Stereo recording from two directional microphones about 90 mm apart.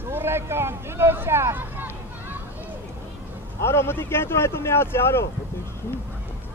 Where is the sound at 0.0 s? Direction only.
25° right (ahead or behind).